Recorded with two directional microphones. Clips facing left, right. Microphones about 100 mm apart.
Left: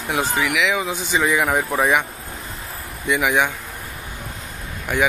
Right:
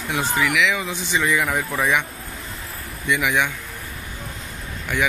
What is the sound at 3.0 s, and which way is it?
Speech, 20° left (ahead or behind).